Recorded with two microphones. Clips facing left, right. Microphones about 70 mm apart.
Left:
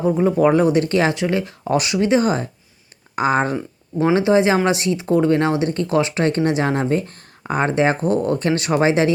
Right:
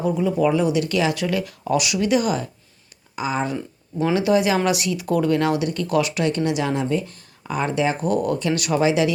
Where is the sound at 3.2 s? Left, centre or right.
Left.